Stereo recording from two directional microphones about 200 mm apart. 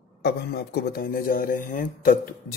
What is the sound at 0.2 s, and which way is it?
Speech, 55° left (ahead or behind).